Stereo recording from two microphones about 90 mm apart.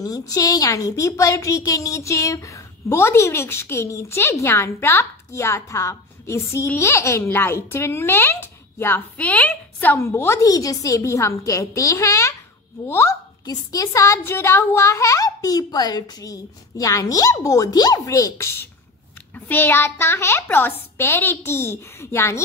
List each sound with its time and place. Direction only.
0.0 s a woman's voice: 40° left (ahead or behind); by 9.9 s 15° left (ahead or behind)
9.9 s a woman's voice: 30° left (ahead or behind)
13.5 s a woman's voice: 40° left (ahead or behind)